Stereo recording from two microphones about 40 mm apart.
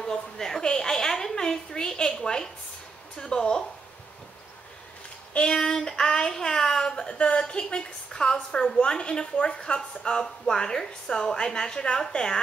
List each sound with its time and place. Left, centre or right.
0.0 s a sound: centre
3.3 s a woman's voice: left
5.3 s speech: left
5.6 s a woman's voice: centre